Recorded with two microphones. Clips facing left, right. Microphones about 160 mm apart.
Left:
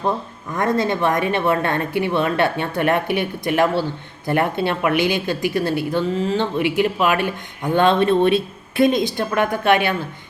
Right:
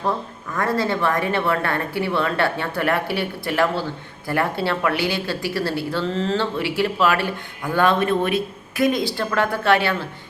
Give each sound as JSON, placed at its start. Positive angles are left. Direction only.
{"t": 0.5, "sound": "a woman's voice", "side_deg": 20}